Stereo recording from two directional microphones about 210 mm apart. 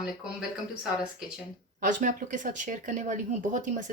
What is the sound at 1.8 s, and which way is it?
Speech, 40° right (ahead or behind).